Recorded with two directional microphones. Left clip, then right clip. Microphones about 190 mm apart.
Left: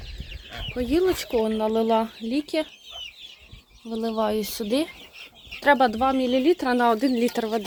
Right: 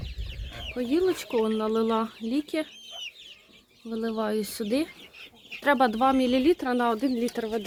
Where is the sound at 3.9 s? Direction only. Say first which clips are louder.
Left 4 dB; 10° left (ahead or behind); by 6.4 s 10° right (ahead or behind).